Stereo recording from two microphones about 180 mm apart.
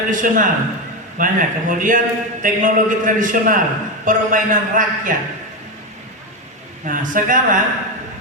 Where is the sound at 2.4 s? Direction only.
45° right (ahead or behind).